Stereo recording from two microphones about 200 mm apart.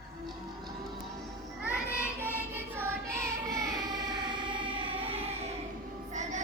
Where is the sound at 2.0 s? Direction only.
10° right (ahead or behind).